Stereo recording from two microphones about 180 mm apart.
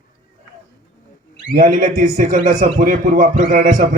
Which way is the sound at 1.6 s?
45° right (ahead or behind).